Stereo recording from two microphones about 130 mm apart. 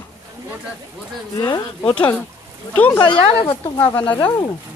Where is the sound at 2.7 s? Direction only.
10° left (ahead or behind).